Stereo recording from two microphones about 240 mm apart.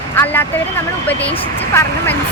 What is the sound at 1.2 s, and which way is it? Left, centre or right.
Speech, left.